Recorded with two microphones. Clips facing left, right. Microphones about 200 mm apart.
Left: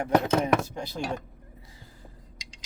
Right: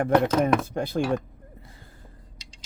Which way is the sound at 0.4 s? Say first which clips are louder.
Right 3 dB; 55° right (ahead or behind).